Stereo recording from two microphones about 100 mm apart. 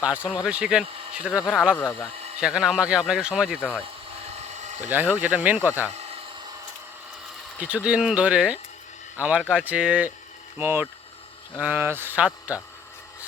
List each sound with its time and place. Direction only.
0.0 s speech: 10° right (ahead or behind)
1.8 s speech: 25° left (ahead or behind)
2.4 s speech: 5° right (ahead or behind)
4.9 s speech: 20° right (ahead or behind)
7.6 s speech: 10° right (ahead or behind)
10.6 s speech: 25° right (ahead or behind)